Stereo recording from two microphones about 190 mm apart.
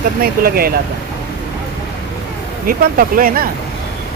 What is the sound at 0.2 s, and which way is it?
Speech, 50° right (ahead or behind).